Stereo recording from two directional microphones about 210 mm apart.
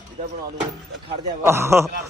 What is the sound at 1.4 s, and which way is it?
Speech, 10° right (ahead or behind).